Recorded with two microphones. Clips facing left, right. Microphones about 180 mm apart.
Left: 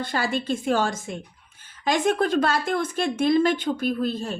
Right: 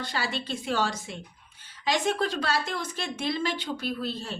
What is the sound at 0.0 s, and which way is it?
Speech, 50° left (ahead or behind).